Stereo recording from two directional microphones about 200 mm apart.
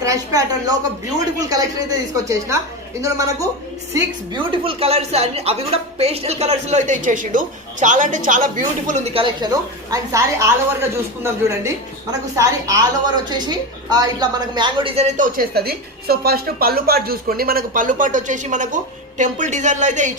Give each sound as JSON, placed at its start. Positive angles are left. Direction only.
{"t": 0.0, "sound": "a woman's voice", "side_deg": -15}